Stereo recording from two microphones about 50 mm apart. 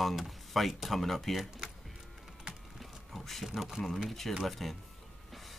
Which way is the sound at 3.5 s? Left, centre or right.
Centre.